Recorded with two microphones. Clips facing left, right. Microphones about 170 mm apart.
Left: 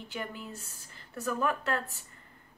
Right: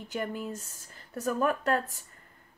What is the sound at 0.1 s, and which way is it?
A woman's voice, 45° right (ahead or behind).